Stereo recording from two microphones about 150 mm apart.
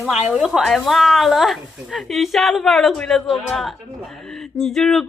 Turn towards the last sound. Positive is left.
turn(degrees=0)  # may be behind; listen again after turning